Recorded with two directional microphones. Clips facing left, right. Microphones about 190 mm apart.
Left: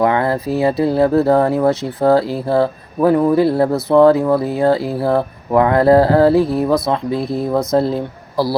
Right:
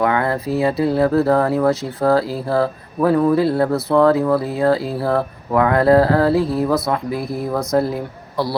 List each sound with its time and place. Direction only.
0.0 s speech: 25° left (ahead or behind)